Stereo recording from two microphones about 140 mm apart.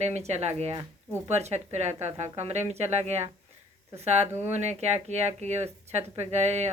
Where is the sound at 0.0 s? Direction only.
50° right (ahead or behind).